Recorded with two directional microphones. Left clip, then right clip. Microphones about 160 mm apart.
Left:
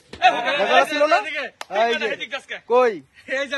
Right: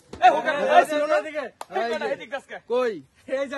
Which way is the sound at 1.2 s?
45° right (ahead or behind).